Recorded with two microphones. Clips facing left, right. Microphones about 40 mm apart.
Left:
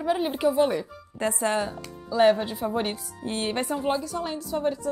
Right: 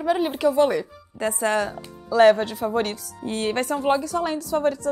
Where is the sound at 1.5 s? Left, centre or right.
Right.